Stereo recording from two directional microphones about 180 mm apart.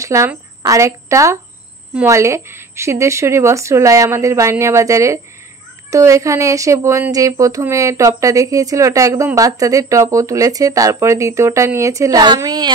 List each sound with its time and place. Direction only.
0.0 s a woman's voice: 15° right (ahead or behind)